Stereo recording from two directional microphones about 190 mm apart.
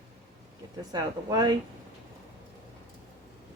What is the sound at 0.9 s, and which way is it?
Speech, 20° right (ahead or behind).